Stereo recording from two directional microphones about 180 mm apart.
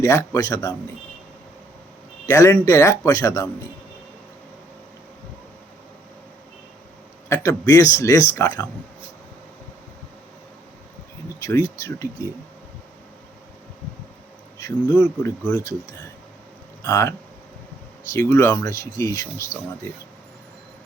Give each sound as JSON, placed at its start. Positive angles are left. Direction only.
{"t": 0.0, "sound": "speech", "side_deg": 15}
{"t": 2.2, "sound": "speech", "side_deg": 15}
{"t": 7.3, "sound": "speech", "side_deg": 15}
{"t": 11.8, "sound": "speech", "side_deg": 15}
{"t": 14.6, "sound": "speech", "side_deg": 15}
{"t": 16.8, "sound": "speech", "side_deg": 15}